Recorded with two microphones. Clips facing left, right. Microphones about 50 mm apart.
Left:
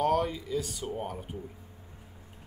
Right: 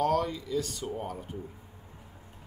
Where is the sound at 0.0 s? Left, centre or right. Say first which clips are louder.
Even; centre.